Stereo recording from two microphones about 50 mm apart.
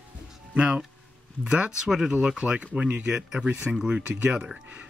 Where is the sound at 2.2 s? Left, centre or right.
Centre.